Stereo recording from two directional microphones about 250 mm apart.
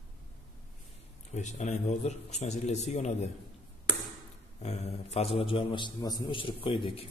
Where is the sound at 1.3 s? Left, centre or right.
Left.